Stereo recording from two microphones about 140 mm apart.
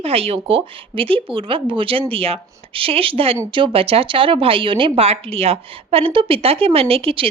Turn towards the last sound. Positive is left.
turn(degrees=-40)  # may be behind; listen again after turning